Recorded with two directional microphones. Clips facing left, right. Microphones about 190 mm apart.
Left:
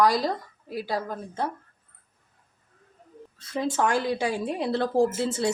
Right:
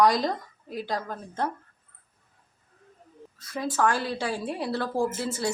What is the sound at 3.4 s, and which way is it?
A woman's voice, 25° left (ahead or behind).